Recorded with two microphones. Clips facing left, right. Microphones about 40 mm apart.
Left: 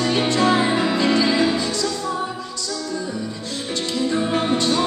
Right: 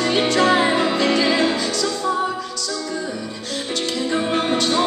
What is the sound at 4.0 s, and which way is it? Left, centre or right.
Music, centre.